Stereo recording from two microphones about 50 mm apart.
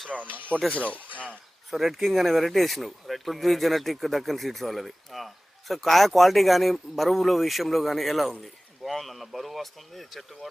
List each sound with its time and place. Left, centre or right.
0.2 s speech: right
0.7 s speech: left
1.7 s speech: centre